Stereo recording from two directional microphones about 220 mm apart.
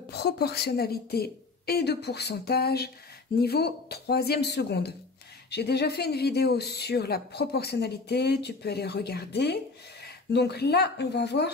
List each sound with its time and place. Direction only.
0.1 s speech: 45° left (ahead or behind)